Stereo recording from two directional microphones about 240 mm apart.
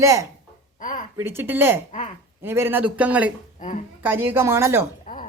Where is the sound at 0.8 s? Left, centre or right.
Left.